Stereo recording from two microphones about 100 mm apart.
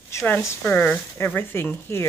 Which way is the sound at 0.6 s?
15° left (ahead or behind).